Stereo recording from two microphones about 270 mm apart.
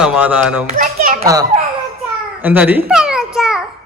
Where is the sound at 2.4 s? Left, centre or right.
Centre.